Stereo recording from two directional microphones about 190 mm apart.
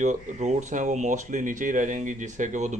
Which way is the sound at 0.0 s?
40° right (ahead or behind).